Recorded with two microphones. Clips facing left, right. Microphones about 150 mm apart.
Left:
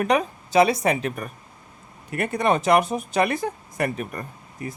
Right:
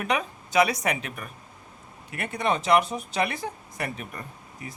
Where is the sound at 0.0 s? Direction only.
40° left (ahead or behind).